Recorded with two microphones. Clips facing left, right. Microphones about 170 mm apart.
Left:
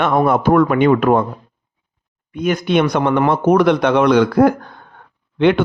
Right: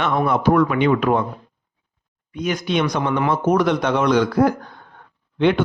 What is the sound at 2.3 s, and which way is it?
A man's voice, 55° left (ahead or behind).